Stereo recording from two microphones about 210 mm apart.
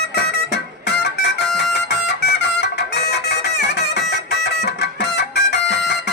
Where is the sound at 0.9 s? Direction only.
55° left (ahead or behind).